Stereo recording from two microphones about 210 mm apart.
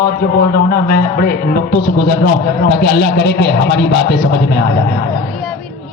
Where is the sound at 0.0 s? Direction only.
45° left (ahead or behind).